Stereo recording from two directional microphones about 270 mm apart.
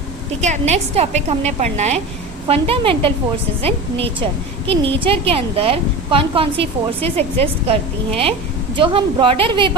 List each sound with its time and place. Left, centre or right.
0.4 s a woman's voice: right